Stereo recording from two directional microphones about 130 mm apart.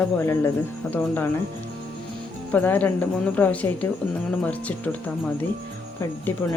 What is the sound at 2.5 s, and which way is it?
Speech, 15° left (ahead or behind).